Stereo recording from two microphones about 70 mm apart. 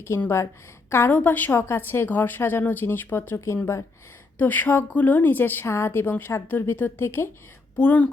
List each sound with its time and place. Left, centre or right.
0.1 s a woman's voice: left
1.1 s a woman's voice: left
1.5 s a woman's voice: left
4.4 s a woman's voice: left